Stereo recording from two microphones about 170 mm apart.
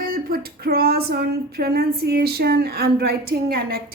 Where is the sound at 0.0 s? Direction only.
60° right (ahead or behind).